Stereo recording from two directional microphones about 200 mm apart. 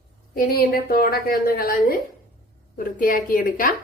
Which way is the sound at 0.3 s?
50° left (ahead or behind).